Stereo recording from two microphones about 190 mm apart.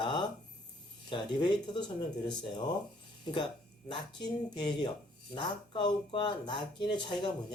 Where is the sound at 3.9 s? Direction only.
20° left (ahead or behind).